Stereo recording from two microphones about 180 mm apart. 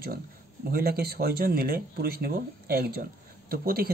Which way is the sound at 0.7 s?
60° right (ahead or behind).